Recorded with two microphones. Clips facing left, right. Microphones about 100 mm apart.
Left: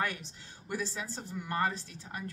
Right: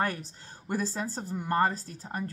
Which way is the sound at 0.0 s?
40° right (ahead or behind).